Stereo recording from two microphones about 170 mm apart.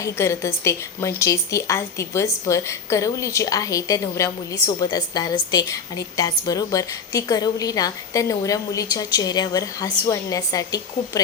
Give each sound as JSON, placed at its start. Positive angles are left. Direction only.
{"t": 0.0, "sound": "a woman's voice", "side_deg": 15}